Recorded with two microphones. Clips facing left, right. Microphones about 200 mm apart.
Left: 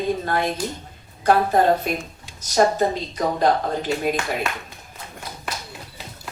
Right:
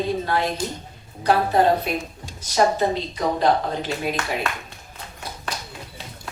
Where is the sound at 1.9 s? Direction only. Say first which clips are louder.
Even; 45° left (ahead or behind).